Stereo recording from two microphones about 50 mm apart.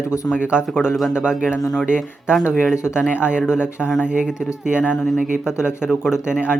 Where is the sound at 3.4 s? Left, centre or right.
Centre.